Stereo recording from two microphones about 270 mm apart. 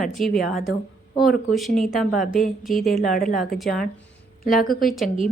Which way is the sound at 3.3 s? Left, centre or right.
Centre.